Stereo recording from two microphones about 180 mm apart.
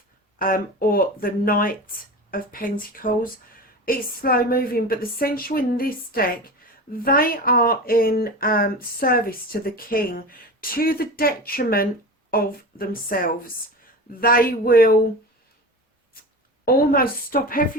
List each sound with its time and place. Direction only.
0.3 s speech: 50° left (ahead or behind)
16.1 s a sound: 55° left (ahead or behind)
16.6 s speech: 55° left (ahead or behind)